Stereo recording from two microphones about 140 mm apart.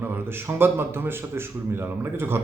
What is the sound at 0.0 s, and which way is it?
Speech, 15° right (ahead or behind).